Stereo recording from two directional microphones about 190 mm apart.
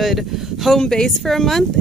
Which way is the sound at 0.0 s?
Centre (ahead or behind).